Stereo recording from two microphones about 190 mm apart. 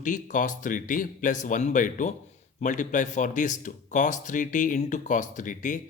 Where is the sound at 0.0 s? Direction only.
40° left (ahead or behind).